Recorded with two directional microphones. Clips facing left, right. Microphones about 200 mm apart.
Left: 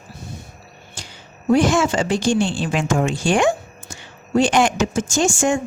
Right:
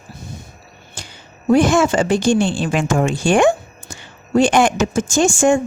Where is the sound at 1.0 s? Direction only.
55° right (ahead or behind).